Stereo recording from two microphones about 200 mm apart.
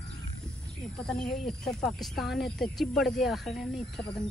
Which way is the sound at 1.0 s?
Centre (ahead or behind).